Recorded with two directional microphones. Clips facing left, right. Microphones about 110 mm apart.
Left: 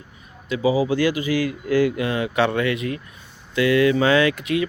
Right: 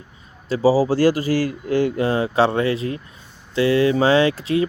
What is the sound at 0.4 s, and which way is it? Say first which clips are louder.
Speech: right 3 dB; 35° right (ahead or behind).